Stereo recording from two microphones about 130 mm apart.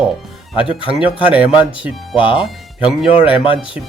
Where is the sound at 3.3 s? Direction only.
40° left (ahead or behind).